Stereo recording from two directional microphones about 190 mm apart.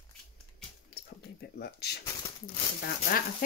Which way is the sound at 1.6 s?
55° left (ahead or behind).